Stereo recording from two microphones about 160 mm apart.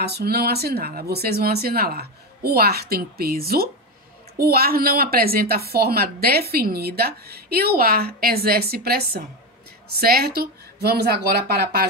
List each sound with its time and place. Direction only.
0.0 s speech: 85° right